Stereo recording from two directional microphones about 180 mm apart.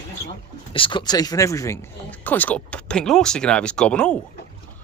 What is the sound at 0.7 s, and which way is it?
Speech, 30° left (ahead or behind).